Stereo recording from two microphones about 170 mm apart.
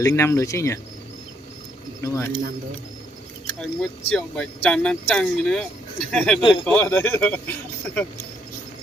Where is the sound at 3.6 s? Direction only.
5° left (ahead or behind).